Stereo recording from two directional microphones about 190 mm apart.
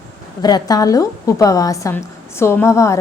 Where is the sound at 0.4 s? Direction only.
20° left (ahead or behind).